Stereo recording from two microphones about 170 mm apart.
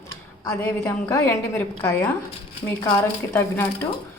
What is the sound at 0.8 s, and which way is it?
Speech, 15° left (ahead or behind).